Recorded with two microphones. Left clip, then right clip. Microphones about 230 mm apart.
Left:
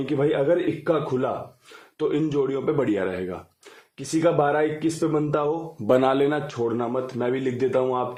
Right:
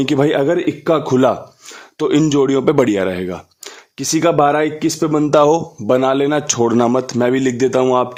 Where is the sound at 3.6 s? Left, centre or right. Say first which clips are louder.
Right 14 dB; right.